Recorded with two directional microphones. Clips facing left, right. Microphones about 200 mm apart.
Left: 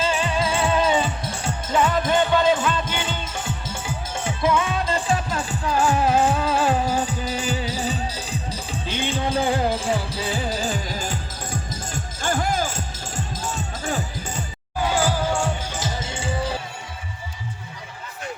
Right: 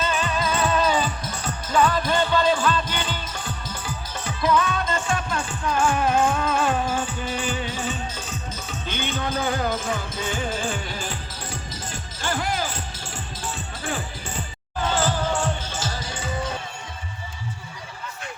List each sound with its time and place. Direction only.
0.0 s music: 30° left (ahead or behind)
14.8 s music: 10° left (ahead or behind); by 16.6 s 30° left (ahead or behind)